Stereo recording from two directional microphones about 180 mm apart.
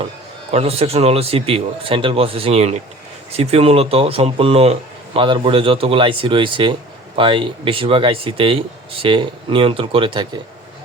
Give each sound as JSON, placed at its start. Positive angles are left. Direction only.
{"t": 0.5, "sound": "speech", "side_deg": -35}